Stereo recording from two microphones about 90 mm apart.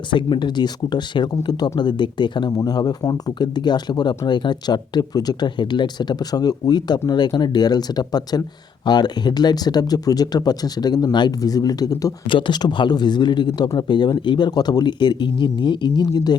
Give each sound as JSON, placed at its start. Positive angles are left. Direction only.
{"t": 0.1, "sound": "a man's voice", "side_deg": 60}
{"t": 12.3, "sound": "a man's voice", "side_deg": 60}